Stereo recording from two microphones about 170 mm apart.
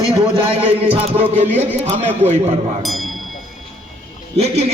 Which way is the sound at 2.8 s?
Centre (ahead or behind).